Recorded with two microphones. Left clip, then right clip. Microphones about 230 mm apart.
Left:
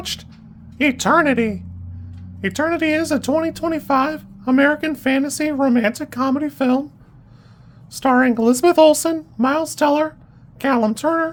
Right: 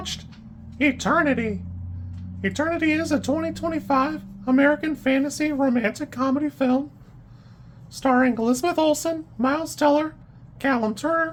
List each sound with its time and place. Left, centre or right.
0.0 s speech: left
7.9 s speech: left